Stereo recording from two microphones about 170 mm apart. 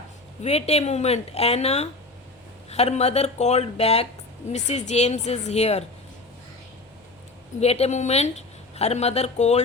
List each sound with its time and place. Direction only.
0.4 s a woman's voice: 40° left (ahead or behind)
7.6 s a woman's voice: 40° left (ahead or behind)